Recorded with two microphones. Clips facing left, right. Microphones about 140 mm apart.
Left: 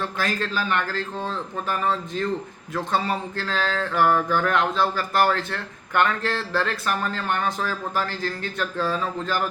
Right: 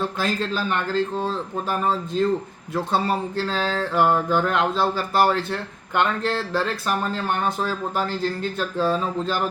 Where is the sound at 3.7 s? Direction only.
20° right (ahead or behind).